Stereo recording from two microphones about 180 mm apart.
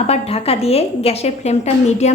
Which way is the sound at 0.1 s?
35° left (ahead or behind).